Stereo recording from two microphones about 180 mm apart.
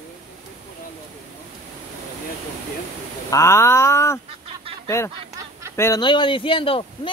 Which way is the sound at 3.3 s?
15° left (ahead or behind).